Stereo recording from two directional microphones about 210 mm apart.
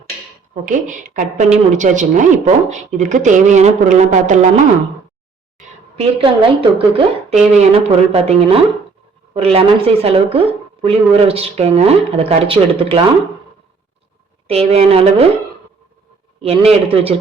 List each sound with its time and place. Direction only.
0.6 s a woman's voice: 40° right (ahead or behind)
6.0 s a woman's voice: 25° right (ahead or behind)
14.4 s a woman's voice: 30° right (ahead or behind)
16.4 s a woman's voice: 30° right (ahead or behind)